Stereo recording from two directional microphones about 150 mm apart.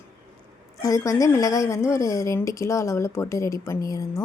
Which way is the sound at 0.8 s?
25° left (ahead or behind).